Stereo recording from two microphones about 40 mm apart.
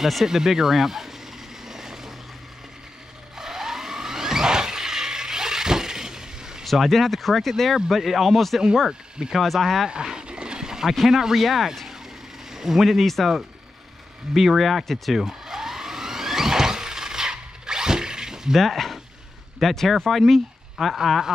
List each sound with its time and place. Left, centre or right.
0.0 s speech: centre
1.7 s vehicle: centre
3.3 s a sound: centre
6.6 s speech: centre
9.8 s a sound: centre
10.9 s speech: centre
12.4 s speech: centre
14.3 s speech: centre
15.2 s a sound: centre
18.6 s speech: centre